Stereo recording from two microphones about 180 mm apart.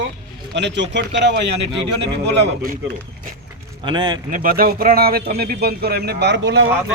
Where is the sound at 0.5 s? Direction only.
75° right (ahead or behind).